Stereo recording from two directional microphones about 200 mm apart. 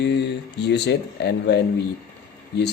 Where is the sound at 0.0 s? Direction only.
60° left (ahead or behind).